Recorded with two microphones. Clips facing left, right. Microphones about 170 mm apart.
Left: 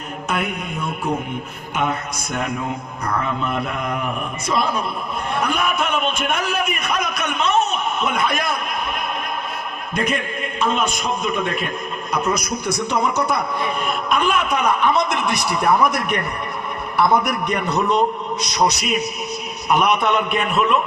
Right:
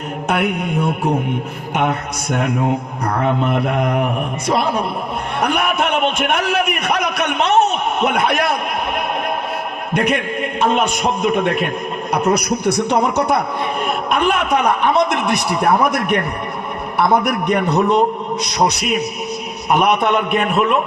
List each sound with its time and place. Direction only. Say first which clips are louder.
0.3 s mantra: right 6 dB; 65° right (ahead or behind)
1.7 s a man's voice: right 4 dB; 65° right (ahead or behind)
9.9 s a man's voice: right 5 dB; 65° right (ahead or behind)